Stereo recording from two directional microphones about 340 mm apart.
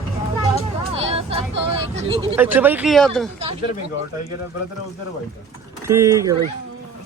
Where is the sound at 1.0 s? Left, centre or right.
Centre.